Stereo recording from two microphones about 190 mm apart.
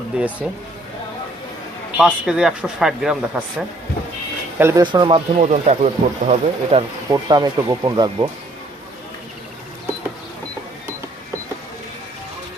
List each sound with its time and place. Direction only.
0.1 s speech: 5° right (ahead or behind)
2.0 s speech: 5° right (ahead or behind)
4.8 s speech: 25° right (ahead or behind)
7.1 s speech: 20° right (ahead or behind)